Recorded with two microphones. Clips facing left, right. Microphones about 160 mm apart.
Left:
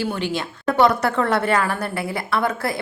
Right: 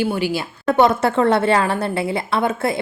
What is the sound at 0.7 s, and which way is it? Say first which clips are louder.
A woman's voice: right 2 dB; 25° right (ahead or behind).